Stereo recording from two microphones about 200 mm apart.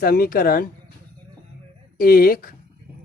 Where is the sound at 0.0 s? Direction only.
50° left (ahead or behind).